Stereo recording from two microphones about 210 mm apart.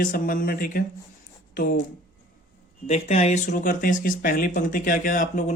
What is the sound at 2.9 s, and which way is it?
Speech, 30° left (ahead or behind).